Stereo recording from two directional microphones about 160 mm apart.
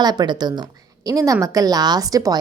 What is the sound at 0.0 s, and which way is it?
A woman's voice, 25° right (ahead or behind).